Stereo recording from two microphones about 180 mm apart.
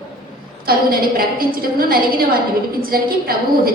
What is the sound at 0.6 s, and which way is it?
A woman's voice, 55° right (ahead or behind).